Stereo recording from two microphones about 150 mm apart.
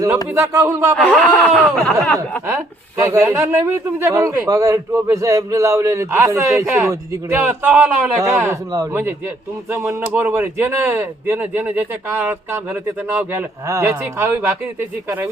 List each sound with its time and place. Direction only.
0.3 s speech: 20° right (ahead or behind)
0.9 s speech: 5° left (ahead or behind)
2.5 s a man's voice: 15° right (ahead or behind)